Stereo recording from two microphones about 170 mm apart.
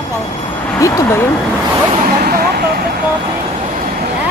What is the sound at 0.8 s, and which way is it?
Speech, 20° left (ahead or behind).